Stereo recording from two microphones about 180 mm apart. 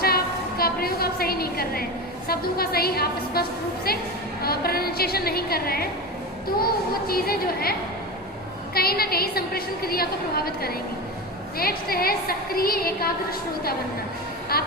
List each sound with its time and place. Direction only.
0.0 s a woman's voice: 60° left (ahead or behind)
7.1 s a woman's voice: 55° left (ahead or behind)
14.5 s a woman's voice: 60° left (ahead or behind)